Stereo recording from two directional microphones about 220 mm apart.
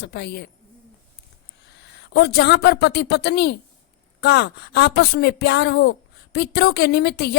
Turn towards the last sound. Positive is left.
turn(degrees=50)  # may be behind; listen again after turning